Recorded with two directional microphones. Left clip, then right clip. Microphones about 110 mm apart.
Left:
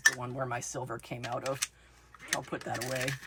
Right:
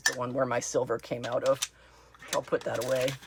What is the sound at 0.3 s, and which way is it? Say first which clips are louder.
Speech: right 8 dB; 70° right (ahead or behind).